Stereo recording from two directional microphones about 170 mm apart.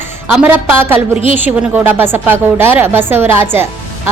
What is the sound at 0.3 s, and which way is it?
A woman's voice, 10° right (ahead or behind).